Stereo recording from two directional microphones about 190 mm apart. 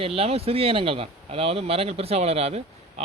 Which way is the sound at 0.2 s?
30° right (ahead or behind).